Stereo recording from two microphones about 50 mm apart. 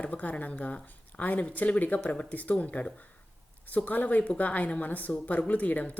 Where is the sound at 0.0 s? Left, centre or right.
Left.